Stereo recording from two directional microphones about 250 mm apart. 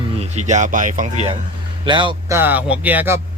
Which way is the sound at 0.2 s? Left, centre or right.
Right.